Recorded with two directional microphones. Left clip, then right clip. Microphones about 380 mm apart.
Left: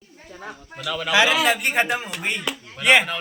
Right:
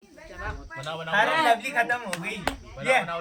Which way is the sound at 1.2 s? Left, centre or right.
Centre.